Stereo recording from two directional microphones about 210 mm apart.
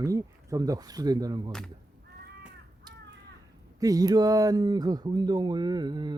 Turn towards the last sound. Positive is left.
turn(degrees=-20)  # may be behind; listen again after turning